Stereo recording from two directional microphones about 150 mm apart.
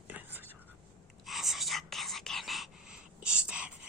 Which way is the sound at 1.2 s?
Centre (ahead or behind).